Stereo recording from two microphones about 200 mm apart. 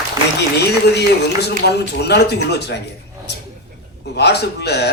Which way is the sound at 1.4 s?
55° left (ahead or behind).